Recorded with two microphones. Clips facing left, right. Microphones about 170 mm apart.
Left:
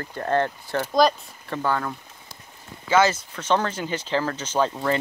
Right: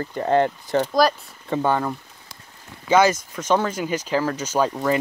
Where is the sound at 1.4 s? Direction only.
20° right (ahead or behind).